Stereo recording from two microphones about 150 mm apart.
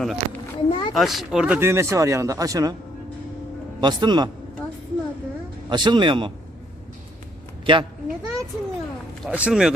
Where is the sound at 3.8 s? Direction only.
30° right (ahead or behind).